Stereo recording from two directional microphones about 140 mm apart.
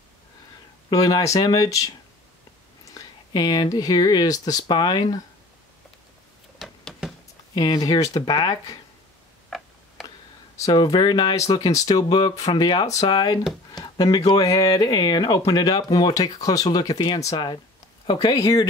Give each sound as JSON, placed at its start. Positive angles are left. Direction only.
{"t": 0.8, "sound": "speech", "side_deg": 30}
{"t": 6.6, "sound": "a sound", "side_deg": 0}
{"t": 7.5, "sound": "speech", "side_deg": 30}
{"t": 9.5, "sound": "tick", "side_deg": 0}
{"t": 10.0, "sound": "a sound", "side_deg": 25}
{"t": 11.5, "sound": "speech", "side_deg": 30}